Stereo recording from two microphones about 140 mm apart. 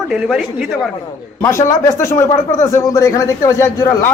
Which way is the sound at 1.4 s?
20° left (ahead or behind).